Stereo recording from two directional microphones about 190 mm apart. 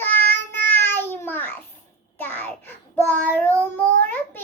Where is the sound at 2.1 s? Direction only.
10° left (ahead or behind).